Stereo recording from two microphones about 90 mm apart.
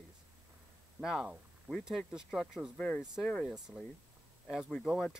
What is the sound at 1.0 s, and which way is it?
Speech, 10° right (ahead or behind).